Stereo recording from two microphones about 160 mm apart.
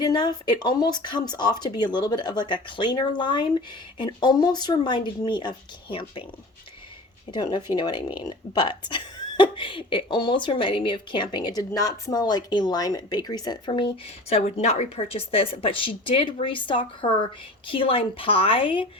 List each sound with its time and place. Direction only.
0.0 s speech: 25° left (ahead or behind)
7.3 s speech: 30° left (ahead or behind)